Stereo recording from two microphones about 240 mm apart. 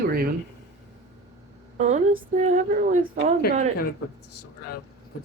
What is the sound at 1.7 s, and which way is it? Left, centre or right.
A woman's voice, right.